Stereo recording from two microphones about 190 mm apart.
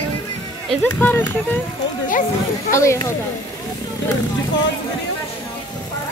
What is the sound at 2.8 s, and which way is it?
Speech, 15° left (ahead or behind).